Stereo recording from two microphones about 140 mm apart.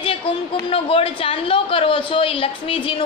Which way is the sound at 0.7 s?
40° left (ahead or behind).